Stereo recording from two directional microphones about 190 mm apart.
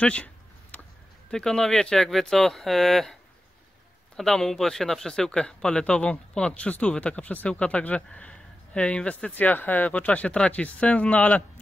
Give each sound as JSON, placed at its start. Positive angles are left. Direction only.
{"t": 0.0, "sound": "a sound", "side_deg": 5}
{"t": 1.3, "sound": "speech", "side_deg": 5}
{"t": 4.2, "sound": "speech", "side_deg": 0}